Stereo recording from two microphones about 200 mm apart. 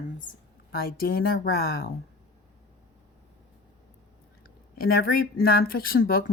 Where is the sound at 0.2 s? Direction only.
45° left (ahead or behind).